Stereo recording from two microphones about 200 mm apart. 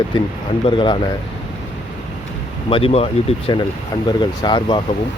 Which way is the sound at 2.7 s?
30° left (ahead or behind).